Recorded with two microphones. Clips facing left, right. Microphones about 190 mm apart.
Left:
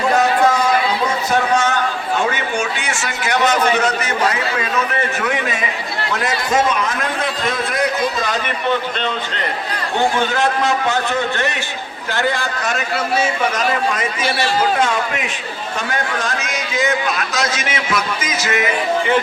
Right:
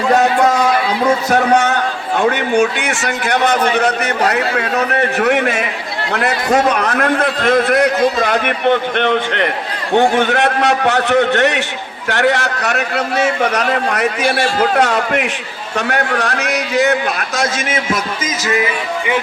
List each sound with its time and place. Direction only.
1.3 s a man's voice: 60° right (ahead or behind); by 18.7 s 35° right (ahead or behind)